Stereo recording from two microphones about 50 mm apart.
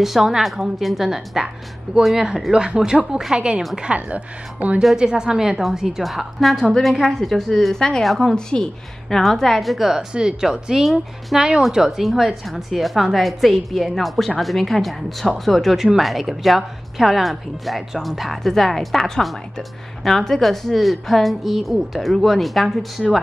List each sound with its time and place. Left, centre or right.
0.0 s a woman's voice: centre; by 4.8 s right
4.9 s speech: centre
8.0 s speech: centre
8.5 s speech: centre
9.1 s speech: centre